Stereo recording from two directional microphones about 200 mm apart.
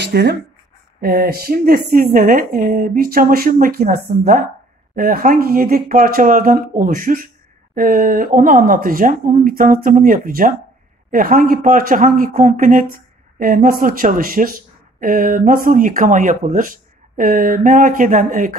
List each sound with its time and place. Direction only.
0.0 s speech: 55° right (ahead or behind)
1.0 s speech: 45° right (ahead or behind)